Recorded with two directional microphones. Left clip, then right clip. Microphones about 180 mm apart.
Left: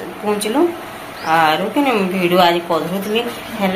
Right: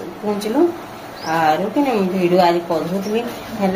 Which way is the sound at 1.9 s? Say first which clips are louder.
Even; 35° left (ahead or behind).